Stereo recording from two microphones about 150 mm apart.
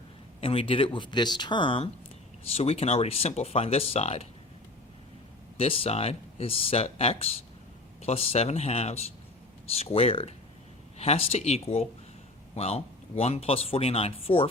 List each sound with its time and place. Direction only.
0.4 s speech: 35° left (ahead or behind)
5.5 s speech: 40° left (ahead or behind)